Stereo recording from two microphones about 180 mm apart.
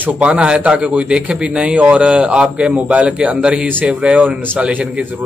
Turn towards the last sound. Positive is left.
turn(degrees=-10)  # may be behind; listen again after turning